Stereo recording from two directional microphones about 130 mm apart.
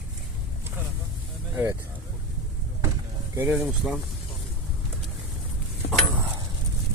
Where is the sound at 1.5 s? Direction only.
20° right (ahead or behind).